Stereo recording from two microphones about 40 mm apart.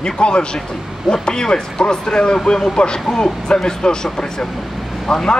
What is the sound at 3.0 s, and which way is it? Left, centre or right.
A man's voice, centre.